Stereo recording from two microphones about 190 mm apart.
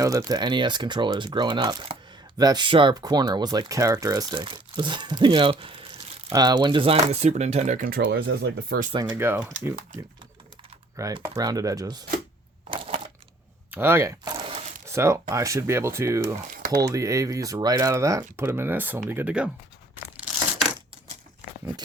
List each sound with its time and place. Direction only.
0.0 s speech: 15° right (ahead or behind); by 8.9 s 55° right (ahead or behind)
8.9 s speech: 20° right (ahead or behind)
10.9 s speech: 15° right (ahead or behind)
12.7 s a sound: 30° right (ahead or behind)
13.7 s speech: 10° right (ahead or behind)
14.3 s a sound: 25° right (ahead or behind)
14.8 s speech: 15° right (ahead or behind)